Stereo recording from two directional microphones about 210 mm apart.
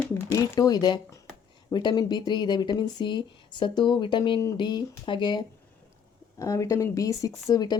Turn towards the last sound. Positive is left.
turn(degrees=20)  # may be behind; listen again after turning